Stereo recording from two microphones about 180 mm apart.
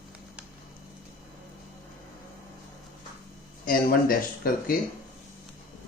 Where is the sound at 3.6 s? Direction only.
55° left (ahead or behind).